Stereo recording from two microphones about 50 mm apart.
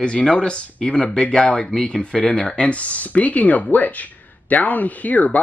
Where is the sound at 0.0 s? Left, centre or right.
Centre.